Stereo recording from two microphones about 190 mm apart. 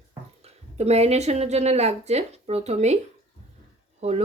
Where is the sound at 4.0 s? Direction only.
35° right (ahead or behind).